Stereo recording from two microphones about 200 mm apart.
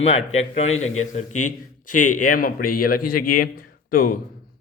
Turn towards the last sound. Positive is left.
turn(degrees=45)  # may be behind; listen again after turning